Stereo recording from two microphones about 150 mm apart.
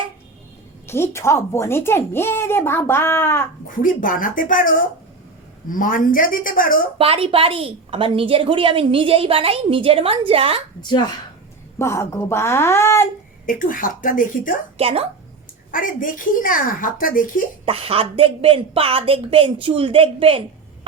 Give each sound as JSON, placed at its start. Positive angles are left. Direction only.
{"t": 0.9, "sound": "speech", "side_deg": 15}
{"t": 3.8, "sound": "a woman's voice", "side_deg": 65}
{"t": 7.0, "sound": "a woman's voice", "side_deg": -40}
{"t": 10.8, "sound": "a woman's voice", "side_deg": 30}
{"t": 11.8, "sound": "speech", "side_deg": 20}
{"t": 13.4, "sound": "a woman's voice", "side_deg": 65}
{"t": 14.8, "sound": "a woman's voice", "side_deg": -40}
{"t": 15.7, "sound": "a woman's voice", "side_deg": 65}
{"t": 17.7, "sound": "a woman's voice", "side_deg": -40}